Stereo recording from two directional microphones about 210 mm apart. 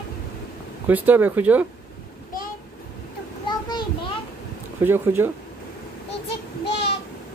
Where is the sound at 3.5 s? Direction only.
20° left (ahead or behind).